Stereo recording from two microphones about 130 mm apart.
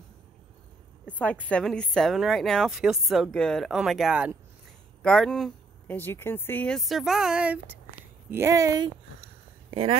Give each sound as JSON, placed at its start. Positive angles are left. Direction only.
{"t": 1.1, "sound": "a woman's voice", "side_deg": 10}
{"t": 5.0, "sound": "a woman's voice", "side_deg": 5}
{"t": 5.9, "sound": "speech", "side_deg": 15}
{"t": 6.7, "sound": "a woman's voice", "side_deg": 0}
{"t": 9.2, "sound": "a sound", "side_deg": -50}